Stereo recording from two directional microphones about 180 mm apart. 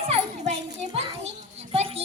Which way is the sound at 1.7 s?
35° right (ahead or behind).